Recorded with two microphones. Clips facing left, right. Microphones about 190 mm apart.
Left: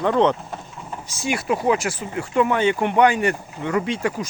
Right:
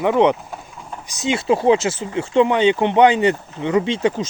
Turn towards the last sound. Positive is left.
turn(degrees=-25)  # may be behind; listen again after turning